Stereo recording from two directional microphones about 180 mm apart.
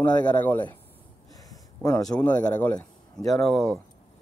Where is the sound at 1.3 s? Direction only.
20° left (ahead or behind).